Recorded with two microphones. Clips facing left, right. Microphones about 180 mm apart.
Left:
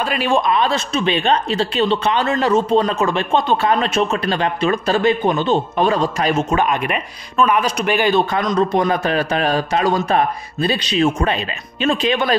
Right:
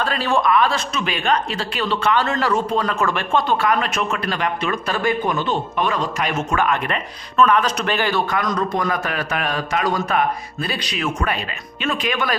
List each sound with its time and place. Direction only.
0.0 s speech: 15° left (ahead or behind)